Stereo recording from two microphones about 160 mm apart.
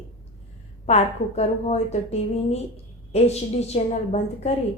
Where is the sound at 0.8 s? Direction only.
40° left (ahead or behind).